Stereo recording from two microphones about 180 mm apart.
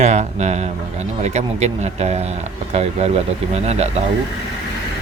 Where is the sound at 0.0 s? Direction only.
40° right (ahead or behind).